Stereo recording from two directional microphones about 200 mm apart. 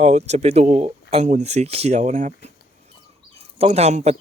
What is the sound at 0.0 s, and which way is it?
Speech, 35° right (ahead or behind).